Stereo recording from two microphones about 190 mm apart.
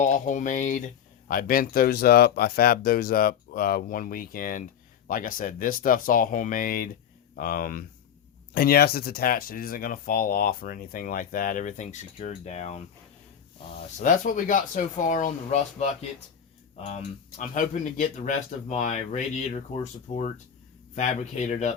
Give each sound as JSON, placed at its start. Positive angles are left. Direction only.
{"t": 0.0, "sound": "speech", "side_deg": 40}